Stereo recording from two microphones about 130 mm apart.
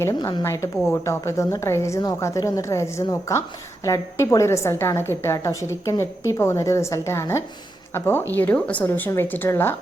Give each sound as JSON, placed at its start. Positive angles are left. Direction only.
{"t": 0.0, "sound": "a woman's voice", "side_deg": 30}